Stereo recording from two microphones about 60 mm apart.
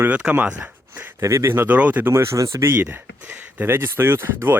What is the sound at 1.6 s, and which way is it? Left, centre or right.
Speech, right.